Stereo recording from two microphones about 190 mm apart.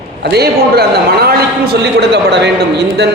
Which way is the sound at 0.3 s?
55° right (ahead or behind).